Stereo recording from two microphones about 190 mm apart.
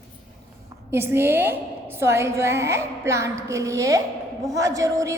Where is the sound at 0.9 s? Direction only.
10° right (ahead or behind).